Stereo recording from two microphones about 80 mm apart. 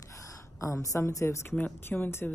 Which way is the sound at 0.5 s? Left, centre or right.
Left.